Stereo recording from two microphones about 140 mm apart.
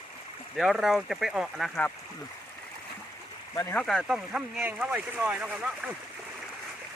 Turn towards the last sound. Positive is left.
turn(degrees=-5)  # may be behind; listen again after turning